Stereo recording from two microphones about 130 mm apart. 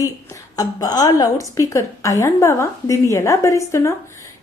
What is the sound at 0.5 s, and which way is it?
A woman's voice, 30° left (ahead or behind).